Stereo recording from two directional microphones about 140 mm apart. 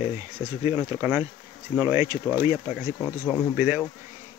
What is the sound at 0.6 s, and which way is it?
Speech, 15° right (ahead or behind).